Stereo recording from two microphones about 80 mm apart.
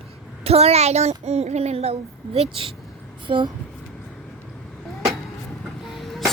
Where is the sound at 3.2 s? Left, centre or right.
Right.